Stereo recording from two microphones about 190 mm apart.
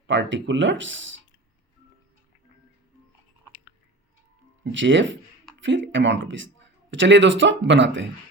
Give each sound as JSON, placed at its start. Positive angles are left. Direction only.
{"t": 0.1, "sound": "speech", "side_deg": -70}
{"t": 4.6, "sound": "speech", "side_deg": -75}